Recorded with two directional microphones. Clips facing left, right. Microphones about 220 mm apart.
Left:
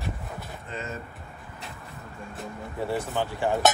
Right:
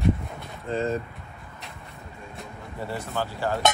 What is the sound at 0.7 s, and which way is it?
Speech, 30° right (ahead or behind).